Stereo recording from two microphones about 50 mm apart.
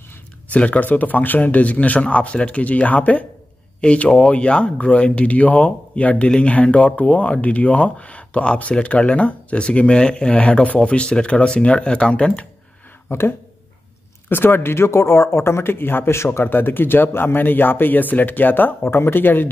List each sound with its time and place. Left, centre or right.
0.5 s speech: left
13.1 s speech: left
14.3 s speech: left
14.9 s speech: left
18.8 s speech: left